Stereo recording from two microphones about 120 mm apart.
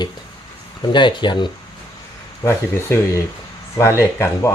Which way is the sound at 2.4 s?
25° left (ahead or behind).